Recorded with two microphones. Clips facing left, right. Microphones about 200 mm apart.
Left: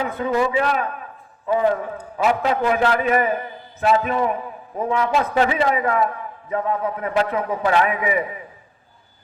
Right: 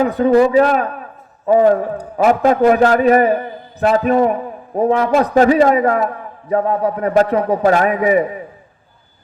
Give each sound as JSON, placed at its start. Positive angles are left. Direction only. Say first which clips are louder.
{"t": 0.0, "sound": "a man's voice", "louder": "right 9 dB", "side_deg": -40}